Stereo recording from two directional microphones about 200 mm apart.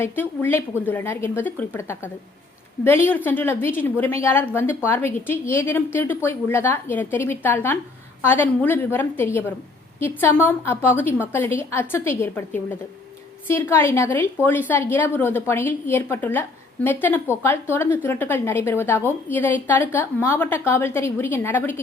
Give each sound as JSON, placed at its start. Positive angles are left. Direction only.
{"t": 0.0, "sound": "a woman's voice", "side_deg": 10}